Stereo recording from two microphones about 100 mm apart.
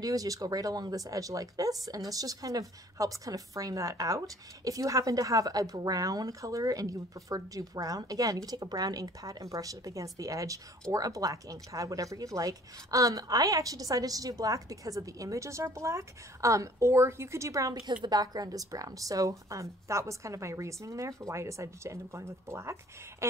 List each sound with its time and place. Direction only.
0.0 s a woman's voice: 35° right (ahead or behind)